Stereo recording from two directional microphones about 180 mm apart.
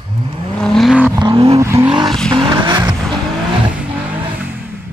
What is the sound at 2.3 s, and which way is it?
Vehicle, 30° right (ahead or behind).